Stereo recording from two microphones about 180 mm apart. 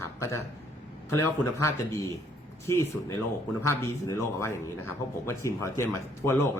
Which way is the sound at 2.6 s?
15° left (ahead or behind).